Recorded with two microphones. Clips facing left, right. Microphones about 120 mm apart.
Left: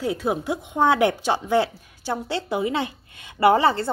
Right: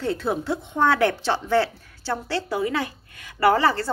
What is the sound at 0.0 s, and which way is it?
A woman's voice, 10° left (ahead or behind).